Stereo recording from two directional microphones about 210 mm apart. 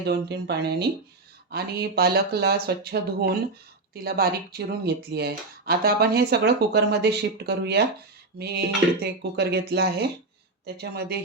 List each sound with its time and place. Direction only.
0.0 s speech: 50° right (ahead or behind)